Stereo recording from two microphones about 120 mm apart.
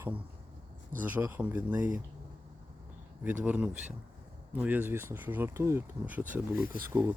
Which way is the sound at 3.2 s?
10° right (ahead or behind).